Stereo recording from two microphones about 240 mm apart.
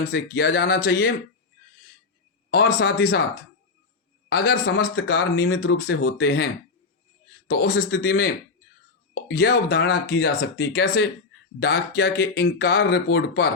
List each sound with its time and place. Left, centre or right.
0.1 s speech: left
2.5 s speech: left
4.3 s speech: left
9.3 s speech: left